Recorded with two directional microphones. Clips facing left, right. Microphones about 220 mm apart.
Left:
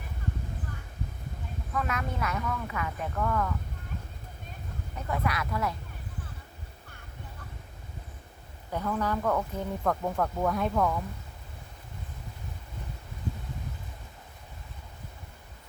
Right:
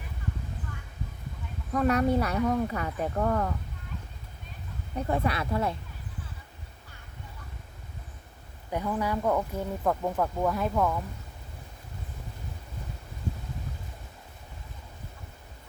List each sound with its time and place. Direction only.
1.7 s speech: 35° right (ahead or behind)
4.9 s speech: 30° right (ahead or behind)
8.7 s speech: 15° right (ahead or behind)